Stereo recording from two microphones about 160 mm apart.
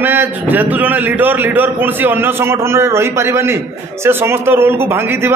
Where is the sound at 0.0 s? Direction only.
10° right (ahead or behind).